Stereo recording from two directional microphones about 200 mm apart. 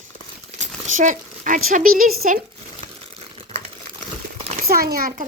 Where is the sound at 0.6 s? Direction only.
40° right (ahead or behind).